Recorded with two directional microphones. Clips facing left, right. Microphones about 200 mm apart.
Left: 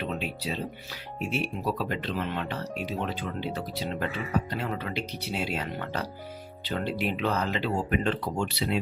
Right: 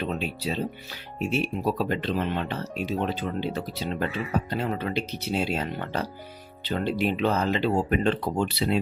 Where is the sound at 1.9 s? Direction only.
30° right (ahead or behind).